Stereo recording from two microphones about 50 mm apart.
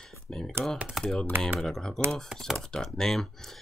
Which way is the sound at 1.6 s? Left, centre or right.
Centre.